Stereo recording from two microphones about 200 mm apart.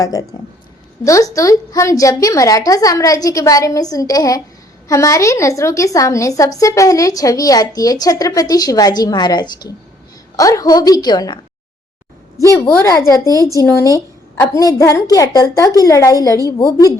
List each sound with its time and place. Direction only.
0.0 s a woman's voice: 15° left (ahead or behind)
12.4 s a woman's voice: 15° left (ahead or behind)